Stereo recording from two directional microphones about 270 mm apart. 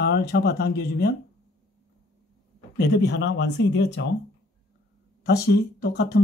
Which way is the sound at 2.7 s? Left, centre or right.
Left.